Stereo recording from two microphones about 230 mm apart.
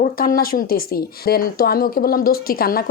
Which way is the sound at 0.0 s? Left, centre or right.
Left.